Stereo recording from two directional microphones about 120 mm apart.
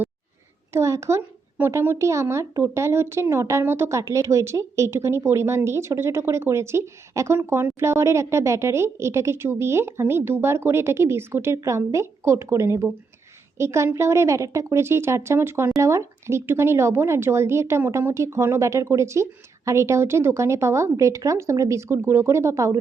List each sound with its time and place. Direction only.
0.7 s speech: 25° right (ahead or behind)